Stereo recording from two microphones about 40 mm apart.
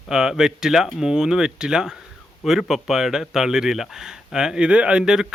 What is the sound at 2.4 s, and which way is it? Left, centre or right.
Speech, centre.